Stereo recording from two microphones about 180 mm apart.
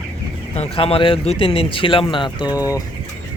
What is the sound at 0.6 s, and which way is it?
Speech, 30° left (ahead or behind).